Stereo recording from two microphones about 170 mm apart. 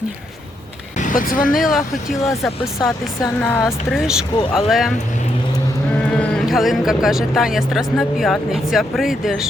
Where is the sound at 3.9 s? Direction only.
5° right (ahead or behind).